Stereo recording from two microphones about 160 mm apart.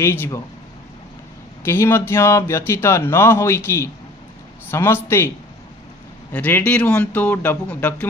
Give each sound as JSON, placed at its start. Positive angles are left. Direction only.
{"t": 0.0, "sound": "speech", "side_deg": 15}
{"t": 1.6, "sound": "speech", "side_deg": 15}
{"t": 6.3, "sound": "speech", "side_deg": 10}